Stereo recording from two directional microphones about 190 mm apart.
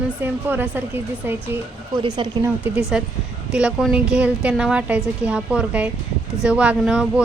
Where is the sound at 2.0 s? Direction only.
25° right (ahead or behind).